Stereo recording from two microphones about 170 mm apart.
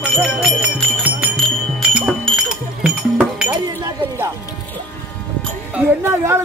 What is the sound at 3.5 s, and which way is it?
Chink, 25° right (ahead or behind).